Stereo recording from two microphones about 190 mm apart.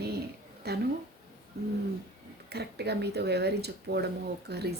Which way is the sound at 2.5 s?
60° right (ahead or behind).